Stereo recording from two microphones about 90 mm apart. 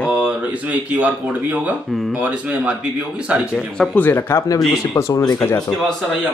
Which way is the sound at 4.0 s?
25° left (ahead or behind).